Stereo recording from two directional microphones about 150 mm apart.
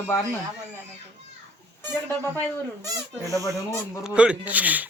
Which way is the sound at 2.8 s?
20° right (ahead or behind).